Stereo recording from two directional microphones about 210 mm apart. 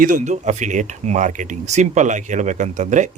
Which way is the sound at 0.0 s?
35° right (ahead or behind).